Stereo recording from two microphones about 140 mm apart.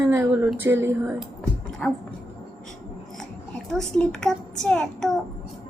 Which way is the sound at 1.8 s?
Centre (ahead or behind).